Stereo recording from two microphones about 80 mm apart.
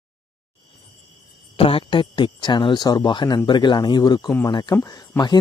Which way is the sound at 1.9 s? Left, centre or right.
Left.